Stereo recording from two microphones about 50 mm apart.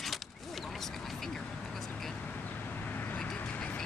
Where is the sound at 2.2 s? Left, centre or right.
Left.